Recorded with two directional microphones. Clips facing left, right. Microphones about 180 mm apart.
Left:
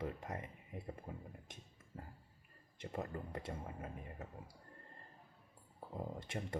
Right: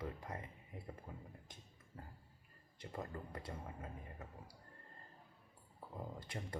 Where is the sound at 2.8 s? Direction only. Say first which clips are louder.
Left 3 dB; 20° left (ahead or behind).